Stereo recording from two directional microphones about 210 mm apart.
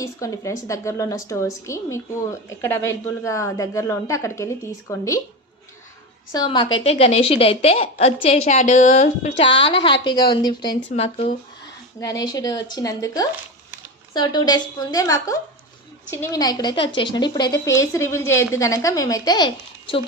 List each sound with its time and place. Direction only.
0.0 s speech: 15° left (ahead or behind)
6.3 s a woman's voice: 20° left (ahead or behind)
9.4 s a woman's voice: 25° left (ahead or behind)
12.0 s a woman's voice: 20° left (ahead or behind)